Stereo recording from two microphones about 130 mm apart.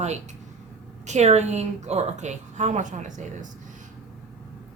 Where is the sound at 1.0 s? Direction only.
60° right (ahead or behind).